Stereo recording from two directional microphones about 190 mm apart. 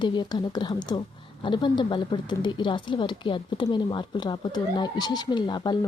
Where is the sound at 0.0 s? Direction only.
25° left (ahead or behind).